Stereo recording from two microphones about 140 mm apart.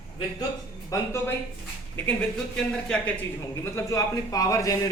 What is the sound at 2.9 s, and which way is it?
Speech, 5° left (ahead or behind).